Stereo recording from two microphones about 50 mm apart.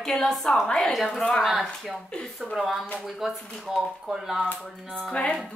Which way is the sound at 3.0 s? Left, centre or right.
Centre.